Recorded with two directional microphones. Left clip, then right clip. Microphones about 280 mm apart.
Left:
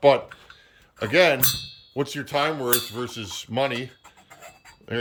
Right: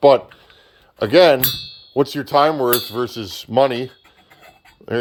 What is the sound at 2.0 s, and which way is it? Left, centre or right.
Speech, right.